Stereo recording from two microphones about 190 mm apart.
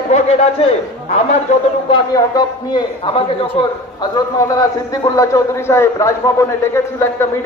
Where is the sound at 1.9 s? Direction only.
20° left (ahead or behind).